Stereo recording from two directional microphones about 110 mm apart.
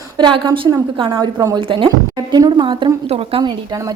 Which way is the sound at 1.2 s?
35° right (ahead or behind).